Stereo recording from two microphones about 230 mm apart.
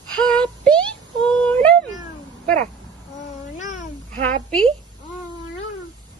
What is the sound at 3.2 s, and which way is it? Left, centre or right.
Cat, left.